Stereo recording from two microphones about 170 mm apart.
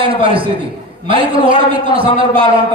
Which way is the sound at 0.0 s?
30° right (ahead or behind).